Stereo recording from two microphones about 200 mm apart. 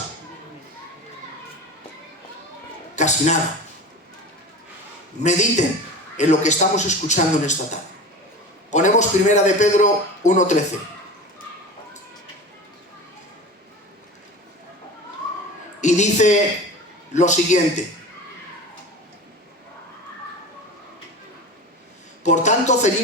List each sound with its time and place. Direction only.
2.9 s a sound: 35° left (ahead or behind)
5.2 s a man's voice: 35° left (ahead or behind)
15.8 s a man's voice: 35° left (ahead or behind)
22.2 s speech: 35° left (ahead or behind)